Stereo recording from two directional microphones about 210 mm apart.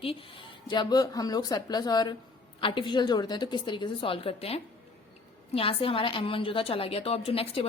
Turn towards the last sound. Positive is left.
turn(degrees=25)  # may be behind; listen again after turning